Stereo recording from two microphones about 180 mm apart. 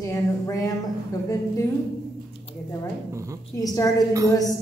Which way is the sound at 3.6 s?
20° left (ahead or behind).